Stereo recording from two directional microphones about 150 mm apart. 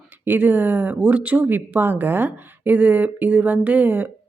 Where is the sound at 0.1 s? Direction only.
10° right (ahead or behind).